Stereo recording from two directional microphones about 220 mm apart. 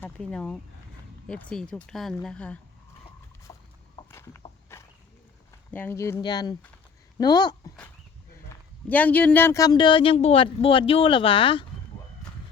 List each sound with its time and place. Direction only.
0.0 s speech: 5° left (ahead or behind)
3.5 s boat: 15° left (ahead or behind)
4.1 s walk: 10° left (ahead or behind)
5.7 s speech: 10° left (ahead or behind)
8.4 s speech: 5° left (ahead or behind); by 11.6 s 25° left (ahead or behind)